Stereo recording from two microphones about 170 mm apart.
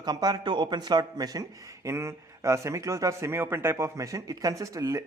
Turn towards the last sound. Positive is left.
turn(degrees=-20)  # may be behind; listen again after turning